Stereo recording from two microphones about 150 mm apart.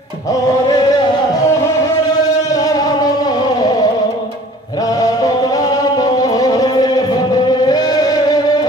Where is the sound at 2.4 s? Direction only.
25° left (ahead or behind).